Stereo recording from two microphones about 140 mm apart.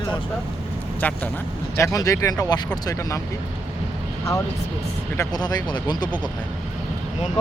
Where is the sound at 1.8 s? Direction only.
25° left (ahead or behind).